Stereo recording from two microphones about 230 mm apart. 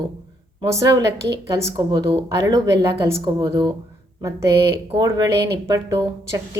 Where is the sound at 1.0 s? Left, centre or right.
Right.